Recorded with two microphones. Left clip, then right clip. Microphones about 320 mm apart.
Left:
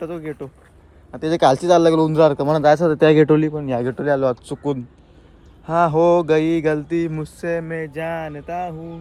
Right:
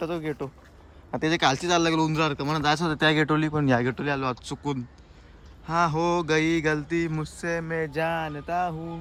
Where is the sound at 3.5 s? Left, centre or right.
Centre.